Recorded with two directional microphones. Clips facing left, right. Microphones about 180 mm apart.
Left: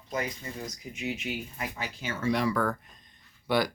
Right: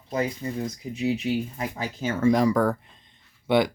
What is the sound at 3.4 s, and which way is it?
Speech, 20° right (ahead or behind).